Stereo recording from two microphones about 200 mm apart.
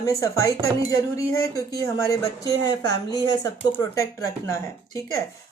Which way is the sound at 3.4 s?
15° left (ahead or behind).